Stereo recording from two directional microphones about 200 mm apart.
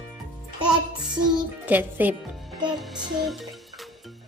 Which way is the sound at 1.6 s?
10° right (ahead or behind).